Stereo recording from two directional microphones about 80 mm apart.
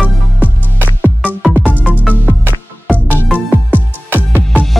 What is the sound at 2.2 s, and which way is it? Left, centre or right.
Music, right.